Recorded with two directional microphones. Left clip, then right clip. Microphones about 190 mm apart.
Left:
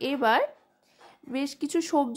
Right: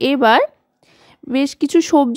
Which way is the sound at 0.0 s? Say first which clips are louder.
Right 11 dB; 40° right (ahead or behind).